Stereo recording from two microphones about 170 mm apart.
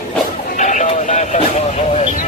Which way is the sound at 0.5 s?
45° left (ahead or behind).